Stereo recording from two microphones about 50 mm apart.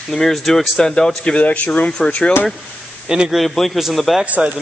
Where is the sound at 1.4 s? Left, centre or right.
Left.